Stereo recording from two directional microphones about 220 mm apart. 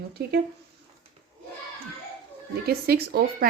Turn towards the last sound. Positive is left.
turn(degrees=-45)  # may be behind; listen again after turning